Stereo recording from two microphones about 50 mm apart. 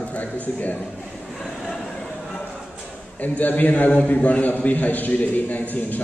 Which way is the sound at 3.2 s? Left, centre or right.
Left.